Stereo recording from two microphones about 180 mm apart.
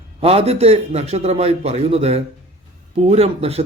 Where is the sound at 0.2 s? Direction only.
35° right (ahead or behind).